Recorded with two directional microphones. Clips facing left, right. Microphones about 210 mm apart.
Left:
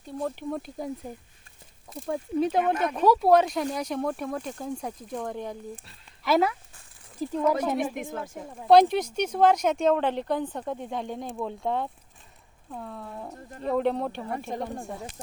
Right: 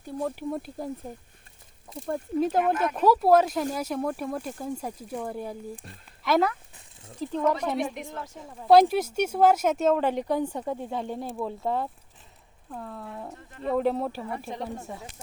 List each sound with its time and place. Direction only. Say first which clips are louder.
0.0 s speech: right 1 dB; 5° right (ahead or behind)
6.2 s speech: even; 5° left (ahead or behind)
7.9 s speech: left 4 dB; 50° left (ahead or behind)
8.6 s speech: even; centre (ahead or behind)
13.3 s speech: left 2 dB; 40° left (ahead or behind)
13.7 s speech: even; centre (ahead or behind)